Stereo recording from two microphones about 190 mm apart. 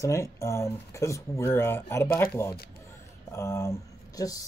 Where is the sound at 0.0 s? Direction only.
15° left (ahead or behind).